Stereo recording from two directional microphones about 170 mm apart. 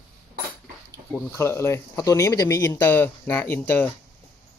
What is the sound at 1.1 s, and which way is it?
Speech, 10° left (ahead or behind).